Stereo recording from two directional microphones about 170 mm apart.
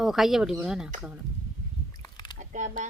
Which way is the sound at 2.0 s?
25° left (ahead or behind).